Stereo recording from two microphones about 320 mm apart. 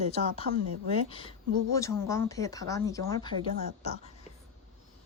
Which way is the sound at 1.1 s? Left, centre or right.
Centre.